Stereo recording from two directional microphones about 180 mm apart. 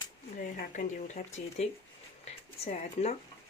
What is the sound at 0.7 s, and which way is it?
Speech, 40° left (ahead or behind).